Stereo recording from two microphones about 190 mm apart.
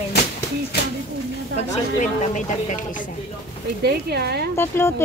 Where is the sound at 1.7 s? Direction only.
40° left (ahead or behind).